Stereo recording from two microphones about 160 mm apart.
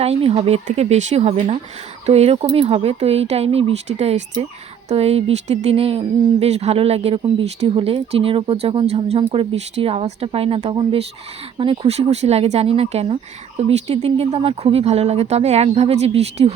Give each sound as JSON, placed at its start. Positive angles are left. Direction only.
{"t": 0.0, "sound": "speech", "side_deg": -40}